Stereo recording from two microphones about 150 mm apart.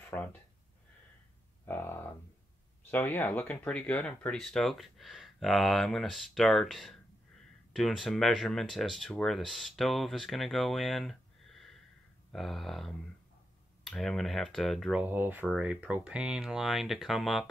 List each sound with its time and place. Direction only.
0.1 s speech: 10° left (ahead or behind)
1.7 s speech: 15° left (ahead or behind)
15.0 s speech: 10° right (ahead or behind)